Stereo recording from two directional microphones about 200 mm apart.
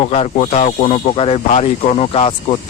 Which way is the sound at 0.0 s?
35° left (ahead or behind).